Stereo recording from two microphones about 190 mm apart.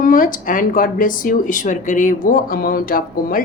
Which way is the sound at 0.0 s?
45° left (ahead or behind).